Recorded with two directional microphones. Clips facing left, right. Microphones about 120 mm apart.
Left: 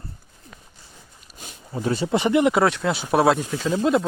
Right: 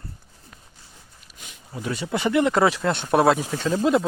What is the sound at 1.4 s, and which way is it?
Speech, 35° left (ahead or behind).